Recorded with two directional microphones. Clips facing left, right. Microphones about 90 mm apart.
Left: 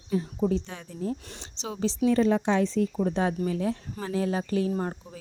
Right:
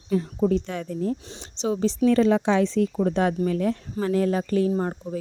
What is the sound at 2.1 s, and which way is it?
Speech, 90° right.